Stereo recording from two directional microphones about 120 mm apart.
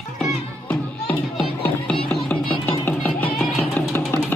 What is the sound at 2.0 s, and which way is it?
Music, 15° left (ahead or behind).